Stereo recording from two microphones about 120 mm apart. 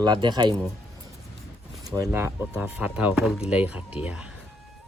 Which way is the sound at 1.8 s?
30° right (ahead or behind).